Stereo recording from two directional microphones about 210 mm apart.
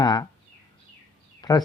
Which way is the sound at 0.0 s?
20° left (ahead or behind).